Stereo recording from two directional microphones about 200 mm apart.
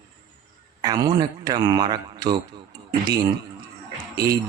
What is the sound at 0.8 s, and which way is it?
Speech, 20° right (ahead or behind).